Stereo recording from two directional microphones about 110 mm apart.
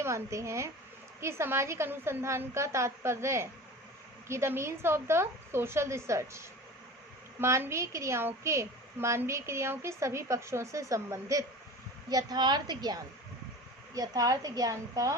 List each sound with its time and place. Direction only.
0.0 s a woman's voice: 25° right (ahead or behind)